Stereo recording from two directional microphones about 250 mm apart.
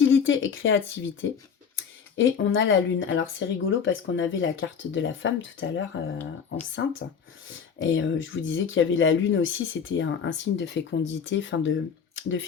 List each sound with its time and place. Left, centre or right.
0.0 s speech: left